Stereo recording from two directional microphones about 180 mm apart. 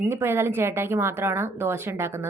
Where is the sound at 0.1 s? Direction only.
15° right (ahead or behind).